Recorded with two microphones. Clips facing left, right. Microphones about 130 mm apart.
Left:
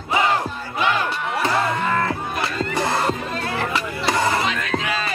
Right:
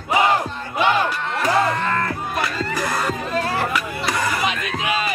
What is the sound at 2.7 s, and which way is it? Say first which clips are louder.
Music: left 2 dB; 25° left (ahead or behind).